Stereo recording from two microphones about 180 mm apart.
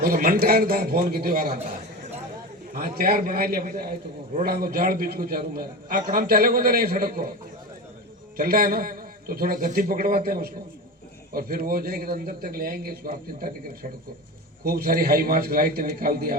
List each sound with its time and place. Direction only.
0.0 s a man's voice: 55° right (ahead or behind)
2.7 s a man's voice: 55° right (ahead or behind)
8.4 s a man's voice: 55° right (ahead or behind)
14.6 s a man's voice: 60° right (ahead or behind)